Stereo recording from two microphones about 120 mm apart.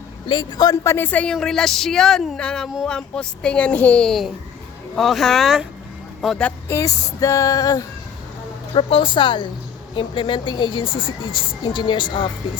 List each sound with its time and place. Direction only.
0.3 s a woman's voice: 40° left (ahead or behind)
0.9 s a woman's voice: 15° left (ahead or behind)
6.7 s a sound: 25° left (ahead or behind)
8.7 s a woman's voice: 45° left (ahead or behind)